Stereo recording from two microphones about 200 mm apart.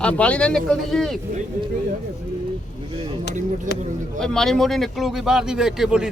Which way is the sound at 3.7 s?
40° right (ahead or behind).